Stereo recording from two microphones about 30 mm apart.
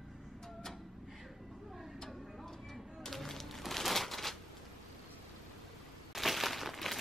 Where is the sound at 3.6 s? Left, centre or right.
Centre.